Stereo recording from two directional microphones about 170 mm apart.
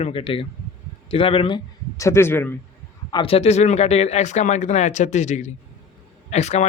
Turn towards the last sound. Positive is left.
turn(degrees=40)  # may be behind; listen again after turning